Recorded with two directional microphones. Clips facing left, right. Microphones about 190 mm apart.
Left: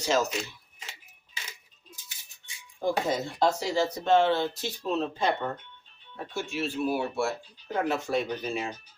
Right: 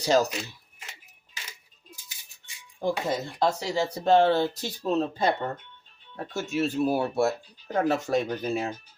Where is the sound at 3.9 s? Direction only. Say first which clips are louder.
Right 4 dB; 35° right (ahead or behind).